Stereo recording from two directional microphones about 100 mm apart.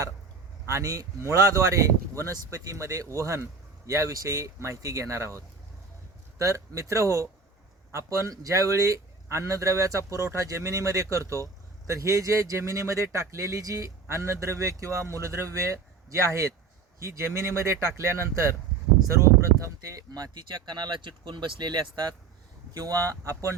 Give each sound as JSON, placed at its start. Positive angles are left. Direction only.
{"t": 0.7, "sound": "speech", "side_deg": -30}
{"t": 19.6, "sound": "speech", "side_deg": -35}